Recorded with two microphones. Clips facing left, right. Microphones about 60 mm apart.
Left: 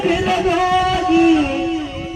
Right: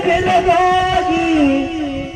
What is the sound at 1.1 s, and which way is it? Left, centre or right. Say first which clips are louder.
Music: left 3 dB; centre.